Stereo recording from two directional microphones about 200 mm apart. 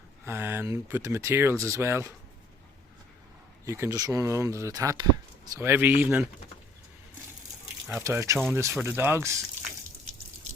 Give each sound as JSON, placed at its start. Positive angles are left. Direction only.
{"t": 0.3, "sound": "speech", "side_deg": -10}
{"t": 3.7, "sound": "speech", "side_deg": -15}
{"t": 8.0, "sound": "speech", "side_deg": -15}